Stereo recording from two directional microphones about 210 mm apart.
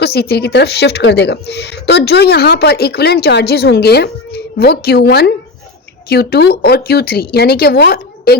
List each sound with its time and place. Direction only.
0.0 s a woman's voice: 50° left (ahead or behind)